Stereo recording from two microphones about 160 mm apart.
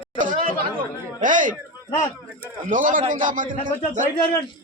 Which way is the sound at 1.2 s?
55° right (ahead or behind).